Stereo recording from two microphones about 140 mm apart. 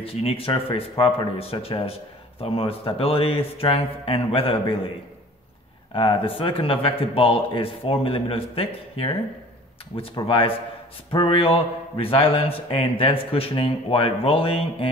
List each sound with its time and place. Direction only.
0.0 s speech: 45° left (ahead or behind)
5.9 s speech: 40° left (ahead or behind)